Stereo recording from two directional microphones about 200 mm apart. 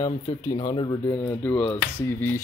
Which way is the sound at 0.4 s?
20° left (ahead or behind).